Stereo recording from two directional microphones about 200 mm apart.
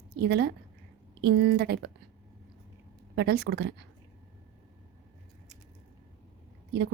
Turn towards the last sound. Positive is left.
turn(degrees=-55)  # may be behind; listen again after turning